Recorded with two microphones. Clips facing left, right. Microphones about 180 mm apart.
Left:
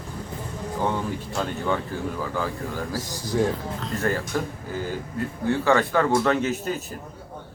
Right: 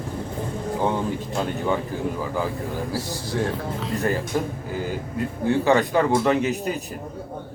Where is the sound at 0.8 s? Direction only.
15° right (ahead or behind).